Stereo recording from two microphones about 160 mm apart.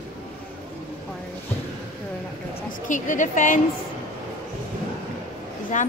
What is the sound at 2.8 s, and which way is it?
Speech, 55° left (ahead or behind).